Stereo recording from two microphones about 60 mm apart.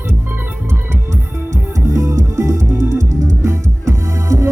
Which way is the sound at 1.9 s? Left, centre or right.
Right.